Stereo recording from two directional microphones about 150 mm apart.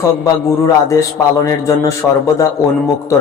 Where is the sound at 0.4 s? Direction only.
20° left (ahead or behind).